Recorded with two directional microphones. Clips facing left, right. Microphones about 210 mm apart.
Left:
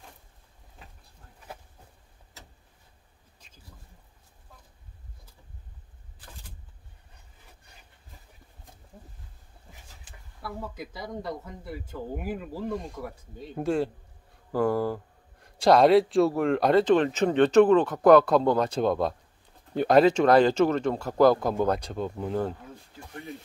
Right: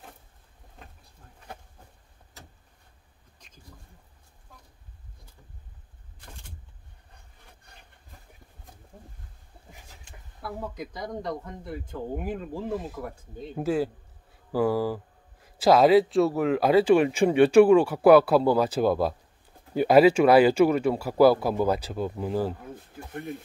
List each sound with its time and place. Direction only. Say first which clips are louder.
10.0 s speech: right 2 dB; centre (ahead or behind)
12.6 s speech: even; 5° right (ahead or behind)